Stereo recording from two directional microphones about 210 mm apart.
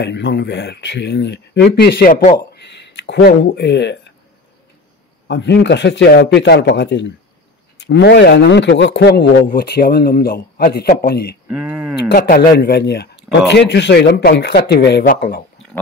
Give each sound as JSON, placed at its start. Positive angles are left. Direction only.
{"t": 0.0, "sound": "speech", "side_deg": 55}
{"t": 5.3, "sound": "speech", "side_deg": 55}
{"t": 11.4, "sound": "a sound", "side_deg": -10}
{"t": 12.0, "sound": "speech", "side_deg": 45}